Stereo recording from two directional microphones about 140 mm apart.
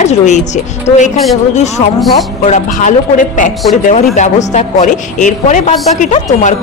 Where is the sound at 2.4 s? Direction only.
60° left (ahead or behind).